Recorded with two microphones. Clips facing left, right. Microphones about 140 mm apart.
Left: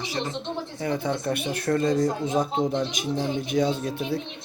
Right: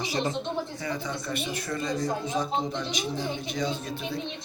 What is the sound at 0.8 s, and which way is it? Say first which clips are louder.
Speech: left 6 dB; 60° left (ahead or behind).